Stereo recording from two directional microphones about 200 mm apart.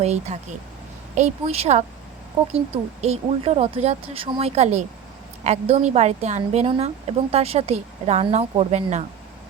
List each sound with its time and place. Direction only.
0.0 s a woman's voice: 35° right (ahead or behind)
3.0 s a woman's voice: 30° right (ahead or behind)